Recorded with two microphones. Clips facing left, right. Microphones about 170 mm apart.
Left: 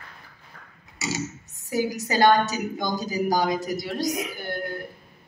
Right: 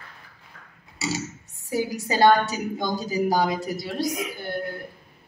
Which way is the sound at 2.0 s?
25° right (ahead or behind).